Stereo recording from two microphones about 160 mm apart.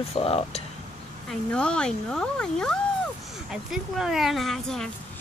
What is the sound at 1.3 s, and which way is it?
Speech, 5° left (ahead or behind).